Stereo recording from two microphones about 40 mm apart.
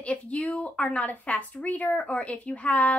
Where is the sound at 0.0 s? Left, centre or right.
Left.